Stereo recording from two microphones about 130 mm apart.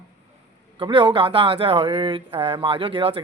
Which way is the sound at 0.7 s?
40° right (ahead or behind).